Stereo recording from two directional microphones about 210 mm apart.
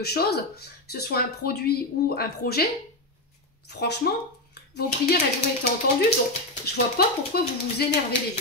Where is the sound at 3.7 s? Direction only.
50° left (ahead or behind).